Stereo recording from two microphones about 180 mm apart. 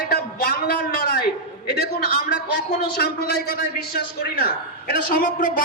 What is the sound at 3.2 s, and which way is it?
Speech, 55° left (ahead or behind).